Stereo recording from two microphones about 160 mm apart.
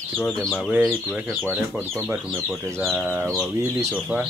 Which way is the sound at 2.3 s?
Centre (ahead or behind).